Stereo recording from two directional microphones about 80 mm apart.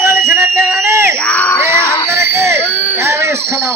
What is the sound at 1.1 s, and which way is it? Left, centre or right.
Crowd, centre.